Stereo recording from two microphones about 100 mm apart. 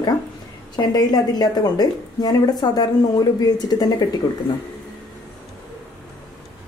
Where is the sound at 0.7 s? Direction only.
40° left (ahead or behind).